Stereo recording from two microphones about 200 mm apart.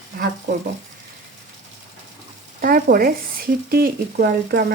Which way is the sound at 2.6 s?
45° right (ahead or behind).